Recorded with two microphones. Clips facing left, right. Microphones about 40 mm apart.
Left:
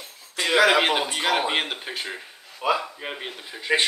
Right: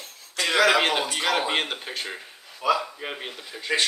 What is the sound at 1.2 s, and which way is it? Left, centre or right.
Speech, centre.